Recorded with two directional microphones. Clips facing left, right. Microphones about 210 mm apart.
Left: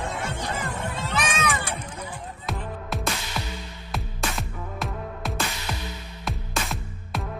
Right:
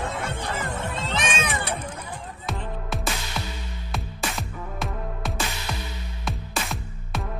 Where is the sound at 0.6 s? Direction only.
25° right (ahead or behind).